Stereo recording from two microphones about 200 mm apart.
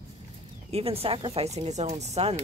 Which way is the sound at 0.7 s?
30° right (ahead or behind).